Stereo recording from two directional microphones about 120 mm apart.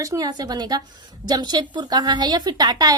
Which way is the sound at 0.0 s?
30° right (ahead or behind).